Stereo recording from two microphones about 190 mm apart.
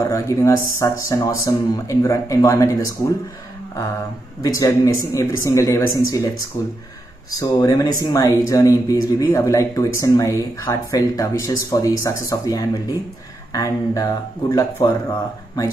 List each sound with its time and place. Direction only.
0.0 s speech: 15° left (ahead or behind)
4.4 s speech: 15° left (ahead or behind)
7.3 s speech: 20° left (ahead or behind)